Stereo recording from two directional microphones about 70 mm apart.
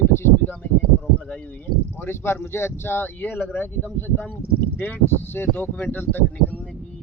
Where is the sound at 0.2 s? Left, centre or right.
Left.